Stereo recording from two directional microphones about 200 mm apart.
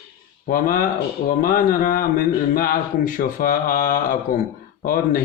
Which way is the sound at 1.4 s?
45° left (ahead or behind).